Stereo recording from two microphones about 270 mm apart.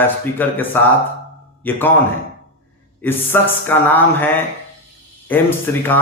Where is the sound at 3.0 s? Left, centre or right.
Centre.